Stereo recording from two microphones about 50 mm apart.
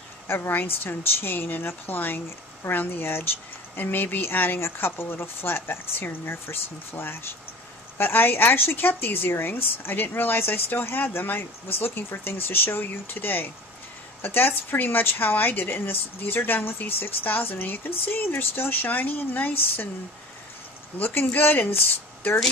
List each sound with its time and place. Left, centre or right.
0.8 s a woman's voice: left
21.0 s a woman's voice: left